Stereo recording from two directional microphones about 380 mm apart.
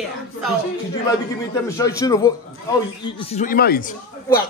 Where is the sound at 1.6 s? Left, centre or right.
Centre.